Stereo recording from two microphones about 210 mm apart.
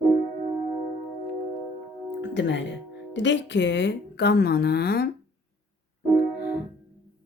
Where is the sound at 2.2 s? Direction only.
55° left (ahead or behind).